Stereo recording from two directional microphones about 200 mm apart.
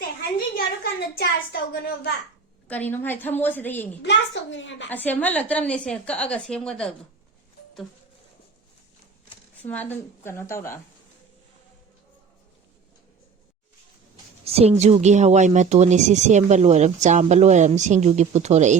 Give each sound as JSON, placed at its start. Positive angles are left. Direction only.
{"t": 0.3, "sound": "a child's voice", "side_deg": 50}
{"t": 2.6, "sound": "a woman's voice", "side_deg": 10}
{"t": 4.0, "sound": "a woman's voice", "side_deg": 60}
{"t": 4.9, "sound": "a woman's voice", "side_deg": 10}
{"t": 9.6, "sound": "a woman's voice", "side_deg": 10}
{"t": 14.4, "sound": "speech", "side_deg": -30}